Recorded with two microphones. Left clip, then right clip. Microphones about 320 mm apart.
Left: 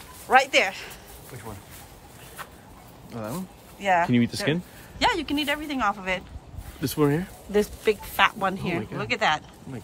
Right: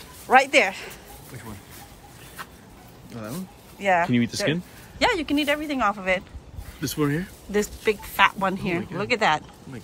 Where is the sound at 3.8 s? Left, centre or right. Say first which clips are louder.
Right 1 dB; centre.